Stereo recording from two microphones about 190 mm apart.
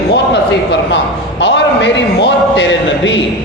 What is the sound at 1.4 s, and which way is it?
A man's voice, 70° left (ahead or behind).